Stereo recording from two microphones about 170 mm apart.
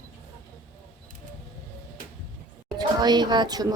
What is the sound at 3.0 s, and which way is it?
Music, 25° right (ahead or behind).